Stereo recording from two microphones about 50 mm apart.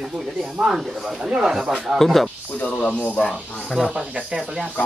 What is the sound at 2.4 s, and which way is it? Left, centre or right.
Speech, left.